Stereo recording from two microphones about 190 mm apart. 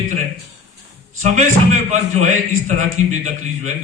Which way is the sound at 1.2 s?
40° right (ahead or behind).